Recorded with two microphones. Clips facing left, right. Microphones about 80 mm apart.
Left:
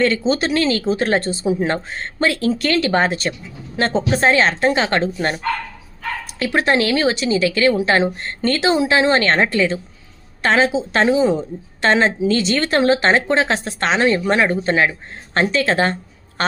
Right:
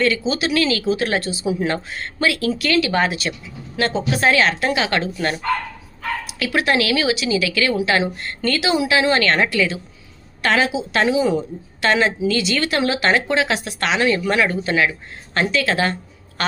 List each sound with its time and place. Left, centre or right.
0.3 s a woman's voice: left
6.4 s a woman's voice: left
16.4 s a sound: left